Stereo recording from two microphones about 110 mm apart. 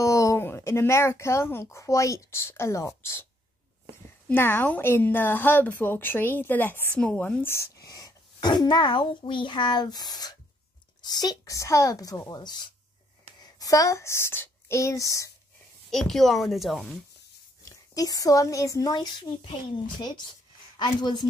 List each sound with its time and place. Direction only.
0.0 s speech: 30° left (ahead or behind)
4.3 s a woman's voice: 20° left (ahead or behind)
7.4 s a woman's voice: 25° left (ahead or behind)
15.9 s a woman's voice: 5° left (ahead or behind)
17.6 s speech: 35° left (ahead or behind)
20.7 s speech: 40° left (ahead or behind)